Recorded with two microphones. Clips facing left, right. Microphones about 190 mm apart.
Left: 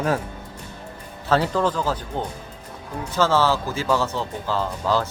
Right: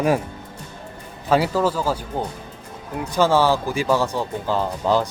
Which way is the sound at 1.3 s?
10° right (ahead or behind).